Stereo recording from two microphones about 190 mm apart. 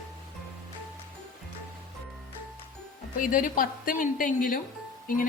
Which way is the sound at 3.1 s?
45° left (ahead or behind).